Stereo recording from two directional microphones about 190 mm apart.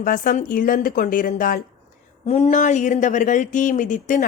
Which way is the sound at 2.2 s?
35° left (ahead or behind).